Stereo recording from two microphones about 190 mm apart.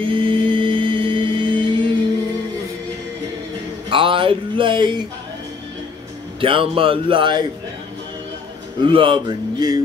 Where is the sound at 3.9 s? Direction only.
25° right (ahead or behind).